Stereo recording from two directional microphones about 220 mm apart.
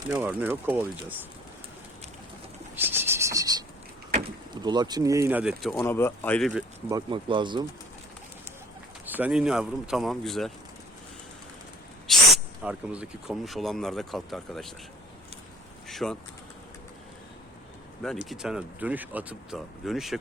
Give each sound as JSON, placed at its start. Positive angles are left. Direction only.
{"t": 0.1, "sound": "speech", "side_deg": -10}
{"t": 2.7, "sound": "a sound", "side_deg": -10}
{"t": 4.5, "sound": "speech", "side_deg": -20}
{"t": 5.8, "sound": "speech", "side_deg": 10}
{"t": 6.9, "sound": "speech", "side_deg": -20}
{"t": 9.0, "sound": "speech", "side_deg": -5}
{"t": 12.0, "sound": "speech", "side_deg": -5}
{"t": 15.9, "sound": "vehicle", "side_deg": 0}
{"t": 18.0, "sound": "speech", "side_deg": 0}